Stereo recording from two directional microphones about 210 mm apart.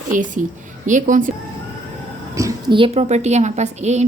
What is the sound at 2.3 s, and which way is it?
A woman's voice, 20° right (ahead or behind).